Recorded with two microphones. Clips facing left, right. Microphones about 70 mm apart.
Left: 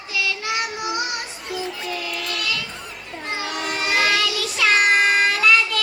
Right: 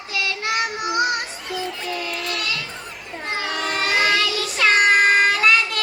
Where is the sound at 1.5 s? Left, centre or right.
Right.